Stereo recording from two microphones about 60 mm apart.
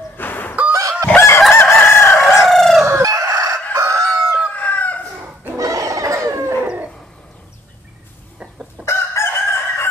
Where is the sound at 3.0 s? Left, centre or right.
Right.